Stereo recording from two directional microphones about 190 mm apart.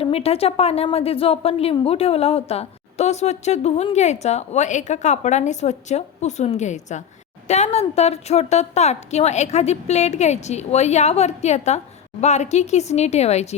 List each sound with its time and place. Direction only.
0.0 s a woman's voice: 30° left (ahead or behind)